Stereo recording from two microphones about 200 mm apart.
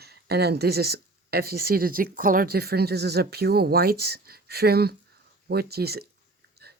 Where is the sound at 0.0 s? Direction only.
55° right (ahead or behind).